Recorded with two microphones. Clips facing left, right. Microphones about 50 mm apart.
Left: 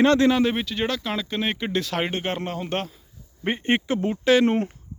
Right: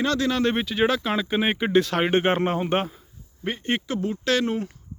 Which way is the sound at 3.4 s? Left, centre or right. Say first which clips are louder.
Left 3 dB; left.